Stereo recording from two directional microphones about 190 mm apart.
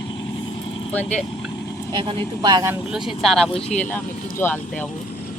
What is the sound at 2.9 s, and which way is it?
Speech, centre (ahead or behind).